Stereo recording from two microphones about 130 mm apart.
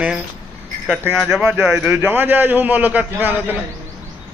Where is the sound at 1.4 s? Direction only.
15° right (ahead or behind).